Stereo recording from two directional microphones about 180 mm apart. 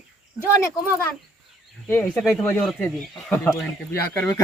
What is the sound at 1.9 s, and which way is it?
Speech, 10° left (ahead or behind).